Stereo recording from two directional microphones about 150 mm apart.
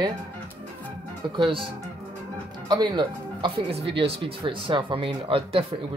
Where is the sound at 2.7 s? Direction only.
30° right (ahead or behind).